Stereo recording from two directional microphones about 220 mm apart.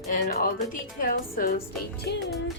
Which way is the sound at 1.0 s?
40° left (ahead or behind).